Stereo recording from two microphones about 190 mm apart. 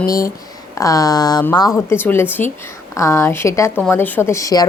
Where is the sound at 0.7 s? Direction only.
20° left (ahead or behind).